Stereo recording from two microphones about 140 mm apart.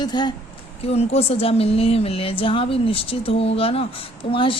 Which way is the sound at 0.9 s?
50° left (ahead or behind).